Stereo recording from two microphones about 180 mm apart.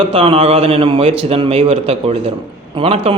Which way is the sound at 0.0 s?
30° right (ahead or behind).